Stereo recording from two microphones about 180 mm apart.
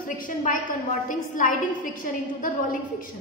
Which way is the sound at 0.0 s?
45° left (ahead or behind).